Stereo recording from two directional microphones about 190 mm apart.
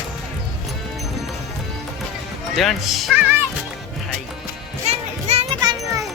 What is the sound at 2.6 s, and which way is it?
Speech, centre (ahead or behind).